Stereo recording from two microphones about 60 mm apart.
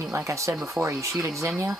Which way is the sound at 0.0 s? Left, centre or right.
Right.